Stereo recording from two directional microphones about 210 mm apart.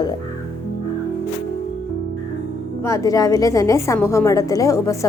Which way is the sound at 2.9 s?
15° left (ahead or behind).